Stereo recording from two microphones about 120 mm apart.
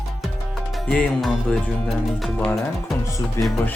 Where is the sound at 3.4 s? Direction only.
25° left (ahead or behind).